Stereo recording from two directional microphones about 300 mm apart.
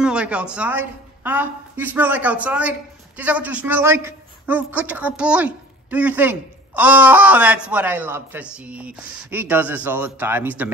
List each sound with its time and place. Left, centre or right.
0.0 s a woman's voice: centre